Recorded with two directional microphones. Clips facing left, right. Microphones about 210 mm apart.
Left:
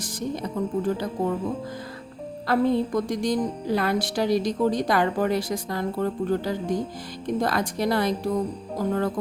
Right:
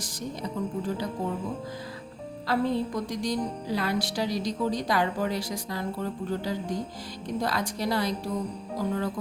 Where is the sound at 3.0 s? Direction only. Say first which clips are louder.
Left 5 dB; 50° left (ahead or behind).